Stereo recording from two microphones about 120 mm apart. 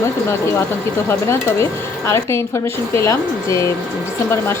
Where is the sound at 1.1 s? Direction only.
20° left (ahead or behind).